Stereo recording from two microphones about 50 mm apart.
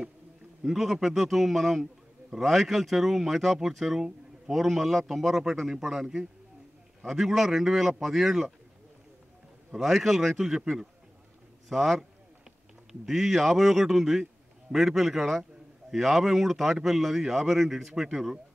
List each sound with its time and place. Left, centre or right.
0.7 s a man's voice: centre
9.7 s speech: centre
11.7 s speech: centre